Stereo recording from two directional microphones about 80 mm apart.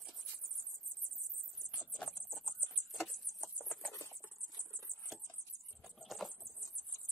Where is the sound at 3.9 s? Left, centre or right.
Left.